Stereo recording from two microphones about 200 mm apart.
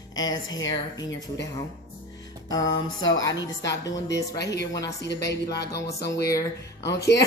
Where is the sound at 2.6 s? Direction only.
70° left (ahead or behind).